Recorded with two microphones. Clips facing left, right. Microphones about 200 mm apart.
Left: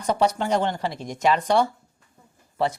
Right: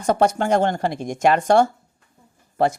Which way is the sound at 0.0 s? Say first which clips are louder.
Right 4 dB; 50° right (ahead or behind).